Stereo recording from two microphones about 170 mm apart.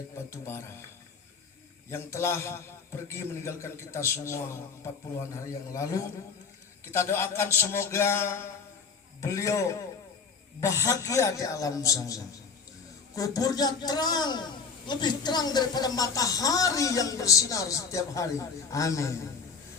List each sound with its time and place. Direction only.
0.3 s a man's voice: 15° left (ahead or behind)
1.9 s a man's voice: 15° left (ahead or behind)